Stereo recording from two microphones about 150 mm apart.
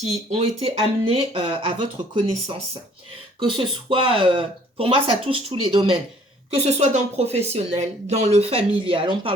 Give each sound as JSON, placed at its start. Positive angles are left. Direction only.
{"t": 0.3, "sound": "speech", "side_deg": -40}
{"t": 6.7, "sound": "speech", "side_deg": -50}